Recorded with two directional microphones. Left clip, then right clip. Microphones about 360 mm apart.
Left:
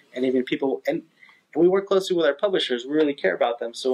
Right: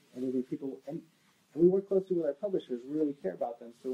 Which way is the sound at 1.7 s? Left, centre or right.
Centre.